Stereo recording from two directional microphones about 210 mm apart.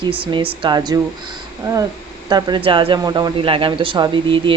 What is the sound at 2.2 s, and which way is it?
Speech, 20° right (ahead or behind).